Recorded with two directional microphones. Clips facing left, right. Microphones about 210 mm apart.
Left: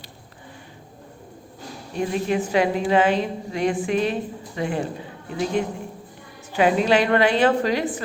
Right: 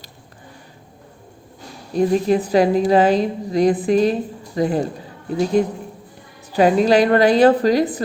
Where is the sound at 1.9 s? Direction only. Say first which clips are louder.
Right 7 dB; 35° right (ahead or behind).